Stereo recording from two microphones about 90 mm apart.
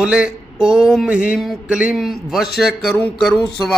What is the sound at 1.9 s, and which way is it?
A man's voice, centre (ahead or behind).